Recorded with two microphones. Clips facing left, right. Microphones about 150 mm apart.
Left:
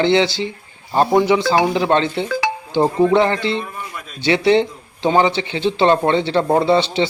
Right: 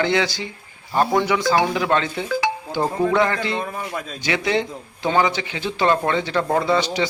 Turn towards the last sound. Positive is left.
turn(degrees=30)  # may be behind; listen again after turning